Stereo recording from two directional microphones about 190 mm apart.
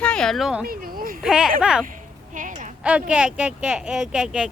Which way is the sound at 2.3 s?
45° right (ahead or behind).